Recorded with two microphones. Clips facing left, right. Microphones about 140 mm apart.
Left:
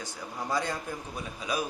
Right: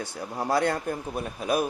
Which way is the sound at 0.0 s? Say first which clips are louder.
Right 6 dB; 65° right (ahead or behind).